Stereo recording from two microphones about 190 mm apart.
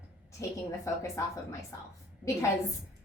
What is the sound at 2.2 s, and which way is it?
Speech, 5° right (ahead or behind).